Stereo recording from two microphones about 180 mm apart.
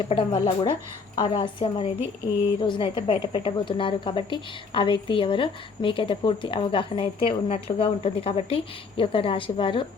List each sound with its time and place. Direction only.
0.1 s speech: 30° left (ahead or behind)